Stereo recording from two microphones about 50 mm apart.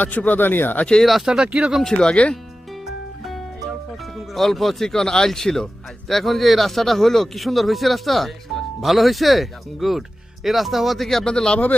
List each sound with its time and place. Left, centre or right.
0.0 s speech: left
1.0 s speech: centre
1.3 s speech: centre
1.8 s speech: centre
2.8 s music: centre
4.4 s speech: centre
11.3 s speech: centre